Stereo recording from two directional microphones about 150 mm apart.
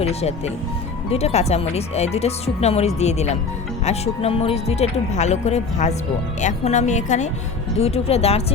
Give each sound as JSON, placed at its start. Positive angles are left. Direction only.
{"t": 0.0, "sound": "speech", "side_deg": 45}
{"t": 7.8, "sound": "speech", "side_deg": 40}